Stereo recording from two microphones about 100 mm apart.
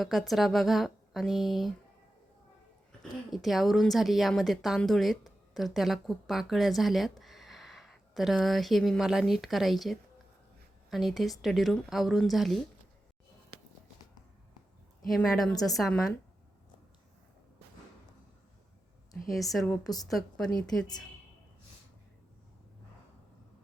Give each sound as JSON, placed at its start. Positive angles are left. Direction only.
{"t": 0.0, "sound": "a woman's voice", "side_deg": 0}
{"t": 3.0, "sound": "a woman's voice", "side_deg": 0}
{"t": 15.0, "sound": "a woman's voice", "side_deg": 0}
{"t": 19.1, "sound": "a woman's voice", "side_deg": 0}
{"t": 20.6, "sound": "a woman's voice", "side_deg": 40}